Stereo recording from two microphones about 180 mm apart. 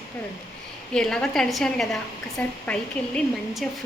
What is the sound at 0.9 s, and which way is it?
Speech, 5° left (ahead or behind).